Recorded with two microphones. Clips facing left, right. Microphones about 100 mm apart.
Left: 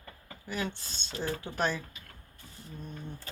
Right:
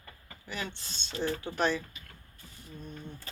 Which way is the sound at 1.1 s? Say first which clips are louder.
Right 2 dB; 5° left (ahead or behind).